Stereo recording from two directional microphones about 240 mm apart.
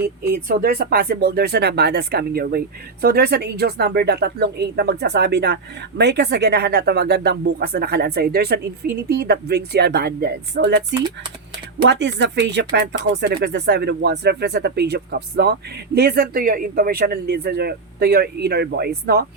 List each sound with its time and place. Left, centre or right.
0.0 s speech: right
11.9 s speech: right